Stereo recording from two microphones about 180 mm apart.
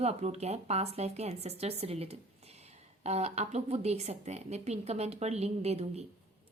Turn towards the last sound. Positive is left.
turn(degrees=-35)  # may be behind; listen again after turning